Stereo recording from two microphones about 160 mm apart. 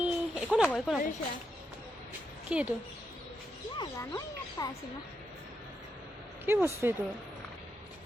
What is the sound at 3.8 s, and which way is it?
Speech, 20° left (ahead or behind).